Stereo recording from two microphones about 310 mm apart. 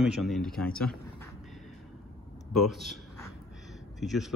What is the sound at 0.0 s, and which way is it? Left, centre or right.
Speech, centre.